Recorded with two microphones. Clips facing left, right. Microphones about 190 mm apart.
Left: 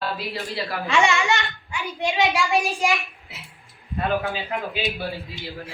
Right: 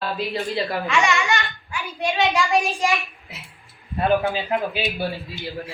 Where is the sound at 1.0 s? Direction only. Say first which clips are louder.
Left 1 dB; 20° left (ahead or behind).